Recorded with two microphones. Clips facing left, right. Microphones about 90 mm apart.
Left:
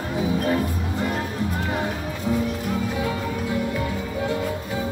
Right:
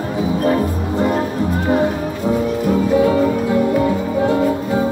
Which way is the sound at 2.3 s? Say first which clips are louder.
Right 7 dB; 50° right (ahead or behind).